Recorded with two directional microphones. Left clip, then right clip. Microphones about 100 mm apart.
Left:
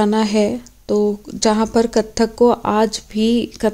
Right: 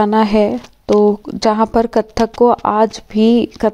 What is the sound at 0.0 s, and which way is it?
A woman's voice, 40° right (ahead or behind).